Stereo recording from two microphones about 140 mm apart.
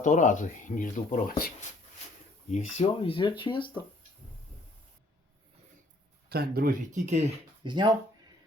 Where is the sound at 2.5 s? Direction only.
50° left (ahead or behind).